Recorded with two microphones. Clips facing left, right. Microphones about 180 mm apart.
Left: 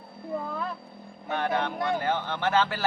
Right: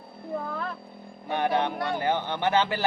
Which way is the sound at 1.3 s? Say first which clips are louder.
Right 2 dB; 15° right (ahead or behind).